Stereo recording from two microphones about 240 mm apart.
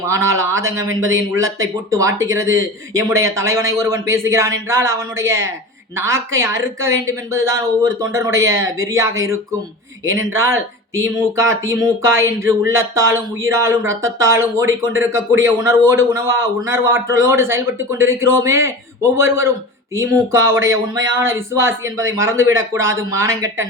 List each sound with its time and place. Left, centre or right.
0.0 s speech: centre
22.8 s speech: right
23.2 s speech: centre